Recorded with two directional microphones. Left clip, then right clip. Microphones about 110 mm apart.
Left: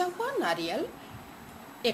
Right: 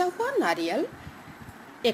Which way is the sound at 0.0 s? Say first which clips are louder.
Right 4 dB; 10° right (ahead or behind).